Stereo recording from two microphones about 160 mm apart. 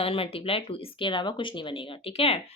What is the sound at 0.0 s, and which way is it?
A woman's voice, 35° left (ahead or behind).